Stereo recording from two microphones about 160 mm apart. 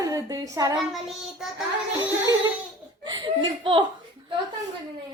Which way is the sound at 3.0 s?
30° right (ahead or behind).